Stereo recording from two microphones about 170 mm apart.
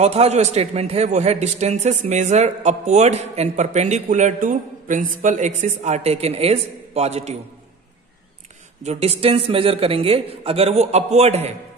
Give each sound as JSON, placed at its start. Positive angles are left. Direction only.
{"t": 0.0, "sound": "a man's voice", "side_deg": -40}
{"t": 8.8, "sound": "a man's voice", "side_deg": -40}